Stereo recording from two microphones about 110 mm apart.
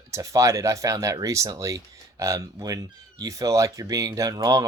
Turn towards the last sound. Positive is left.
turn(degrees=-35)  # may be behind; listen again after turning